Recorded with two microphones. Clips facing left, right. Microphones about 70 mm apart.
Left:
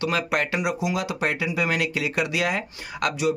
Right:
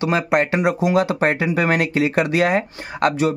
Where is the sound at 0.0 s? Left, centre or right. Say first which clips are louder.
Right 6 dB; right.